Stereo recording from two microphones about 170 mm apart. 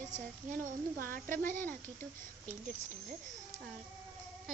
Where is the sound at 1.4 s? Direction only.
10° left (ahead or behind).